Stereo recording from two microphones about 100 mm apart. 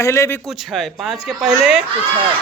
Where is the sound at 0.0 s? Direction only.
30° left (ahead or behind).